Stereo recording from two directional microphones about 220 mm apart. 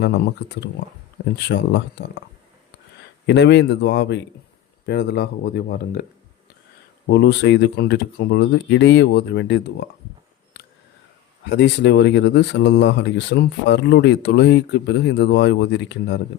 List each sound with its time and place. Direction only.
0.0 s speech: 50° left (ahead or behind)
3.2 s speech: 50° left (ahead or behind)
7.1 s speech: 50° left (ahead or behind)
11.4 s speech: 50° left (ahead or behind)